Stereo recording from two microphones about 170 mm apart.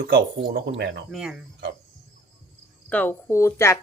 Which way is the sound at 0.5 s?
85° right.